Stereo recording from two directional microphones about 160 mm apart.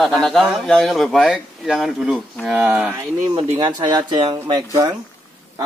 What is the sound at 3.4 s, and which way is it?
Speech, 25° right (ahead or behind).